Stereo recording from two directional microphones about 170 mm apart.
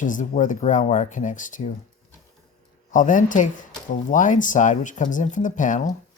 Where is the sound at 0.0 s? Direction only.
50° left (ahead or behind).